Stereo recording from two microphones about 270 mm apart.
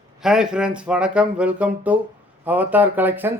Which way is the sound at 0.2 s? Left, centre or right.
Centre.